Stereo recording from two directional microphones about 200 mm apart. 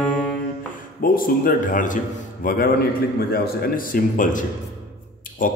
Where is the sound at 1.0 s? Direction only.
45° left (ahead or behind).